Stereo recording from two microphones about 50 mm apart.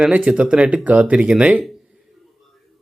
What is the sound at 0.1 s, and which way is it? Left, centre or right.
Speech, right.